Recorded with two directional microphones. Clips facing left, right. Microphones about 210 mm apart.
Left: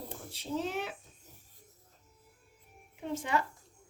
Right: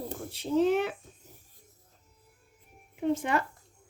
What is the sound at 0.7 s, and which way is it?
Speech, 55° right (ahead or behind).